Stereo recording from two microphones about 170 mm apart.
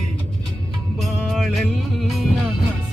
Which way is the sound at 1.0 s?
Centre (ahead or behind).